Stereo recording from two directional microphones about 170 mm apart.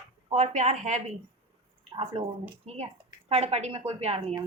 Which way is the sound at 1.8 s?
35° right (ahead or behind).